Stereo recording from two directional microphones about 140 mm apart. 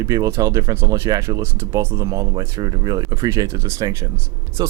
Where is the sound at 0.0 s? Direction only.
25° right (ahead or behind).